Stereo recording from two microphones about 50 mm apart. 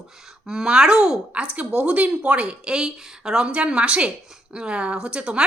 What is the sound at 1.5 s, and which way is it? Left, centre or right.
Speech, right.